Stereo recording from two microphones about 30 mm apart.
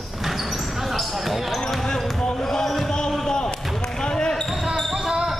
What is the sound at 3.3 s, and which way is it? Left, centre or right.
Basketball bounce, left.